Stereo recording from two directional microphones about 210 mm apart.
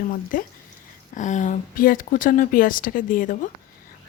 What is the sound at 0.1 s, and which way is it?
Speech, 40° left (ahead or behind).